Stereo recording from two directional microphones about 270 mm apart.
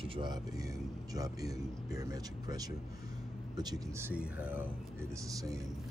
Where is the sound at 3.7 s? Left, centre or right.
Centre.